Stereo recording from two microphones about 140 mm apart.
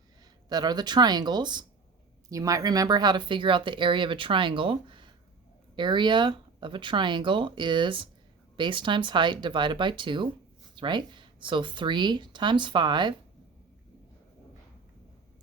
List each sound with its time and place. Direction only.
0.4 s speech: 30° right (ahead or behind)